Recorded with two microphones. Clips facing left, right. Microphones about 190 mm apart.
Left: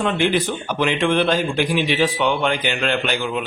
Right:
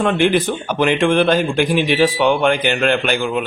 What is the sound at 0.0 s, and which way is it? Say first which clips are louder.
A man's voice: right 4 dB; 50° right (ahead or behind).